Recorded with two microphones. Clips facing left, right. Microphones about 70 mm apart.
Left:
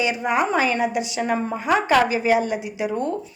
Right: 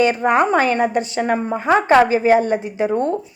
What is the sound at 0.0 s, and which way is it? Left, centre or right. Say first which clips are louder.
A woman's voice: right 6 dB; right.